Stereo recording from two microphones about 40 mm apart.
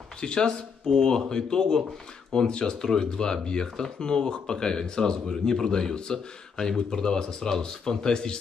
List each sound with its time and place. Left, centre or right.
0.2 s speech: centre